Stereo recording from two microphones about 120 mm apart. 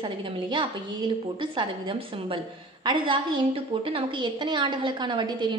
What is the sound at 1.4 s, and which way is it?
A woman's voice, 45° right (ahead or behind).